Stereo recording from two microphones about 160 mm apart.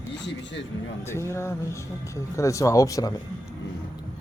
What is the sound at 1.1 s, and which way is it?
Speech, 15° left (ahead or behind).